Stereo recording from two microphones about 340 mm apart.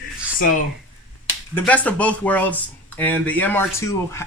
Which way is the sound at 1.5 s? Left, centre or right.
Centre.